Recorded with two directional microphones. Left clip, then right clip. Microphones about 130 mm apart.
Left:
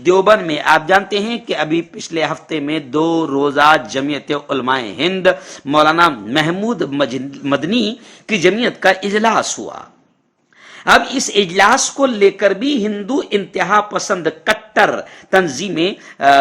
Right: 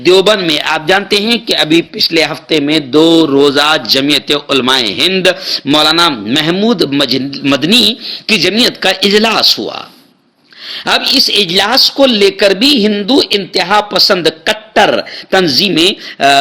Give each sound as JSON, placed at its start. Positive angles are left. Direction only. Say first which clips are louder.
{"t": 0.0, "sound": "a man's voice", "louder": "right 3 dB", "side_deg": -35}
{"t": 10.8, "sound": "a man's voice", "louder": "right 3 dB", "side_deg": -35}
{"t": 15.3, "sound": "a man's voice", "louder": "right 5 dB", "side_deg": -30}